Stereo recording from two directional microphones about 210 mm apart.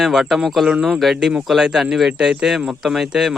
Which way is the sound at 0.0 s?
Centre (ahead or behind).